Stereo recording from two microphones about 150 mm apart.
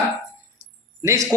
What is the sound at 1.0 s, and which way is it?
Speech, 20° right (ahead or behind).